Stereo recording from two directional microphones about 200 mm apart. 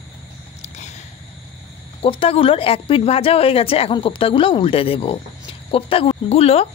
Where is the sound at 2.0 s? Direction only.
30° left (ahead or behind).